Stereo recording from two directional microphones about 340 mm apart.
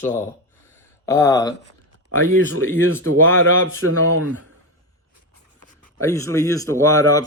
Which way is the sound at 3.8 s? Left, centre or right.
Right.